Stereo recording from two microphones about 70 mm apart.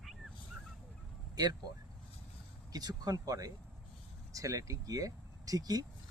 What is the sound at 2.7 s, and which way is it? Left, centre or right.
Speech, right.